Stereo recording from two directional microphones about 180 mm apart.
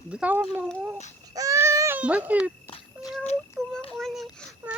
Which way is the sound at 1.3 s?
20° right (ahead or behind).